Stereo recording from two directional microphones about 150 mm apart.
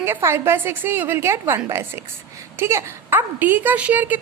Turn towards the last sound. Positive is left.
turn(degrees=-10)  # may be behind; listen again after turning